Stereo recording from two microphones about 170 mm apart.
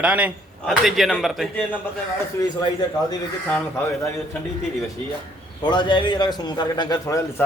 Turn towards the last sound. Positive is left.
turn(degrees=20)  # may be behind; listen again after turning